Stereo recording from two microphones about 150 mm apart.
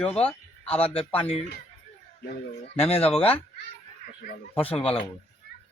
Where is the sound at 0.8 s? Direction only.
40° left (ahead or behind).